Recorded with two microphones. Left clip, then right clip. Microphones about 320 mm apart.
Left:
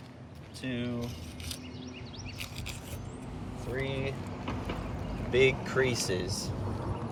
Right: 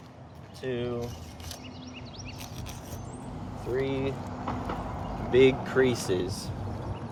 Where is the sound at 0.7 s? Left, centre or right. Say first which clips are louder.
Right 4 dB; centre.